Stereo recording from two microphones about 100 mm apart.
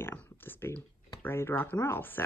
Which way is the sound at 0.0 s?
20° left (ahead or behind).